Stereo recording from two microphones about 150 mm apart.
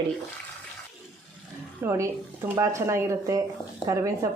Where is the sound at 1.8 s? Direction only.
20° right (ahead or behind).